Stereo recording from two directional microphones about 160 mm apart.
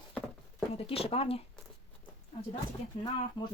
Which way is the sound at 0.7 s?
40° left (ahead or behind).